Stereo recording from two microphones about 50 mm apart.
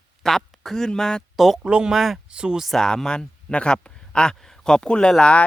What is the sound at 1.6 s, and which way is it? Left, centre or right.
Speech, right.